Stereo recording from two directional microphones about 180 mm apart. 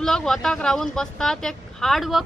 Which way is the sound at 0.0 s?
Centre (ahead or behind).